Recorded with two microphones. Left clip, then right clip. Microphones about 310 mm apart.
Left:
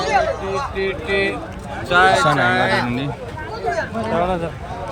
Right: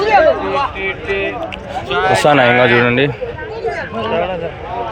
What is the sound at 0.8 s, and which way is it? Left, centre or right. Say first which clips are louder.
A man's voice: right 1 dB; left.